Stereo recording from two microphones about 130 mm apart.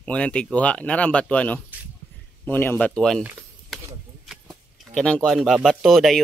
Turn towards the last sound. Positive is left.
turn(degrees=0)  # may be behind; listen again after turning